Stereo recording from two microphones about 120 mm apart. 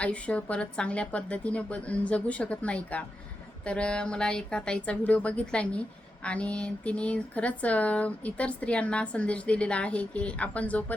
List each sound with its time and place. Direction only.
0.0 s speech: 10° left (ahead or behind)